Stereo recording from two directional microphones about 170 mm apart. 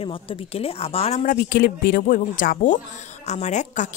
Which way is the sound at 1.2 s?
55° left (ahead or behind).